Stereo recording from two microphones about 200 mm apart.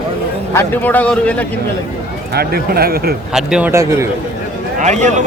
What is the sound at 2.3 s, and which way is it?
Speech, 50° right (ahead or behind).